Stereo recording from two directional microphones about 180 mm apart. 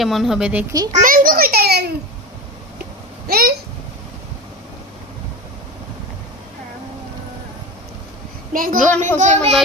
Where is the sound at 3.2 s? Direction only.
60° right (ahead or behind).